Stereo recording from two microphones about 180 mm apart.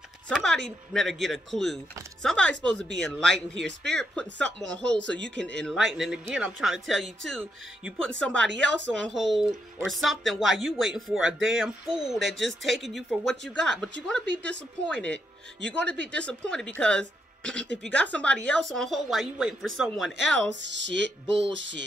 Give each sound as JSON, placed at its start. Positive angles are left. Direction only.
{"t": 0.3, "sound": "speech", "side_deg": 5}
{"t": 2.2, "sound": "a sound", "side_deg": 5}
{"t": 2.6, "sound": "speech", "side_deg": 5}
{"t": 14.2, "sound": "a woman's voice", "side_deg": -75}
{"t": 14.9, "sound": "speech", "side_deg": 5}
{"t": 20.6, "sound": "music", "side_deg": -80}